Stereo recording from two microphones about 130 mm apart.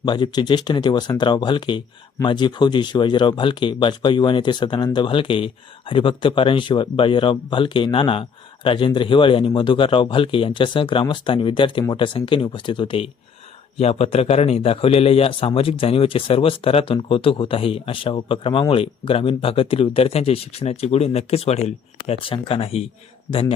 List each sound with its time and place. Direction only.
0.0 s speech: 35° left (ahead or behind)
13.7 s a man's voice: 50° left (ahead or behind)